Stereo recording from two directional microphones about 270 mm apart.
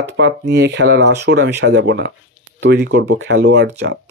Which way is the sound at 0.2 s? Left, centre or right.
Right.